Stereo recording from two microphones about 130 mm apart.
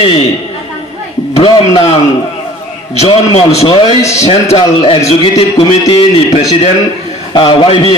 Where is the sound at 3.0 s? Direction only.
55° left (ahead or behind).